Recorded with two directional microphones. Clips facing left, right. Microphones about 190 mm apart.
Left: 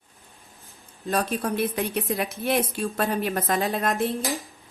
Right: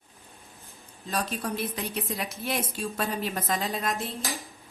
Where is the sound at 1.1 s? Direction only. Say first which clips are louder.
Left 5 dB; 55° left (ahead or behind).